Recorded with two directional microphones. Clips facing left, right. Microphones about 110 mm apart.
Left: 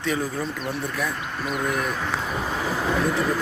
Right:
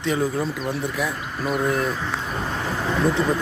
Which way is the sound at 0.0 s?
20° right (ahead or behind).